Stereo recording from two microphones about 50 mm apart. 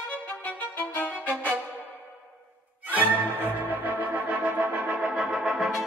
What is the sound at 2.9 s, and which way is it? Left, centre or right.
Music, right.